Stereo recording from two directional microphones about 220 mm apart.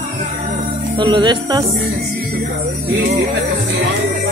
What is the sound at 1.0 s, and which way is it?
Speech, 20° right (ahead or behind).